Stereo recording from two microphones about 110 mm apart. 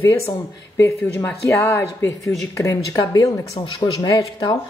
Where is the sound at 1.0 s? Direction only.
15° left (ahead or behind); by 4.5 s 35° left (ahead or behind).